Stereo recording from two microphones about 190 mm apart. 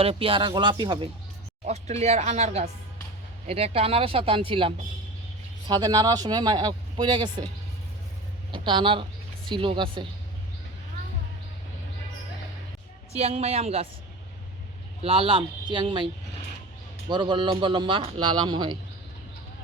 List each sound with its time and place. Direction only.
0.0 s speech: 30° right (ahead or behind)
8.5 s speech: 25° right (ahead or behind)
13.1 s speech: 35° right (ahead or behind)
15.0 s speech: 30° right (ahead or behind)
17.1 s speech: 25° right (ahead or behind)